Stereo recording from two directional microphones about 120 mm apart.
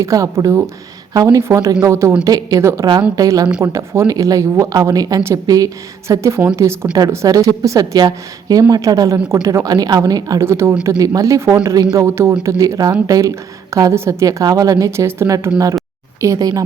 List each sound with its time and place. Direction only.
0.0 s a woman's voice: 25° right (ahead or behind)